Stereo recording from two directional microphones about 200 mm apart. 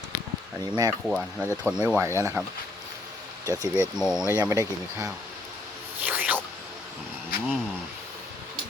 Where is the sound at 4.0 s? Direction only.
5° right (ahead or behind).